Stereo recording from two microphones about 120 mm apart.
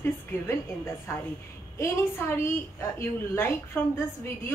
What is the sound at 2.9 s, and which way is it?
Speech, 20° left (ahead or behind).